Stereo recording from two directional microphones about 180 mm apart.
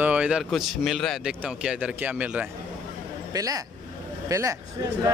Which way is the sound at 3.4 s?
20° right (ahead or behind).